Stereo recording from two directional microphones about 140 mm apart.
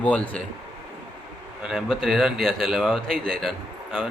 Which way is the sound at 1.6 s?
Centre (ahead or behind).